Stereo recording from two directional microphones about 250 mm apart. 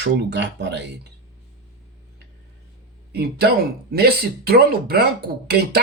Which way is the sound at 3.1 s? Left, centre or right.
Right.